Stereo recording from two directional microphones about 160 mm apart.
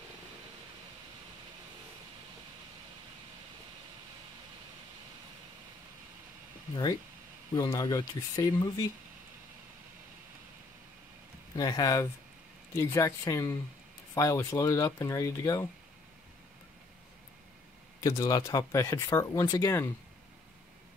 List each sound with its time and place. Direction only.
7.5 s speech: 20° left (ahead or behind)
11.5 s speech: 25° left (ahead or behind)
18.0 s speech: 20° left (ahead or behind)